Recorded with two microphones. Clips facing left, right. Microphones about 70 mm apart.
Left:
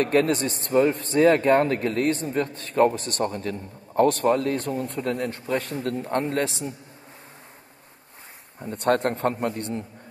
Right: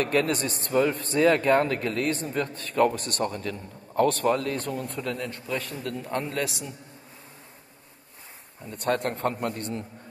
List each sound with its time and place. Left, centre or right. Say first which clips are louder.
0.0 s a man's voice: left 4 dB; left
8.6 s a man's voice: left 5 dB; left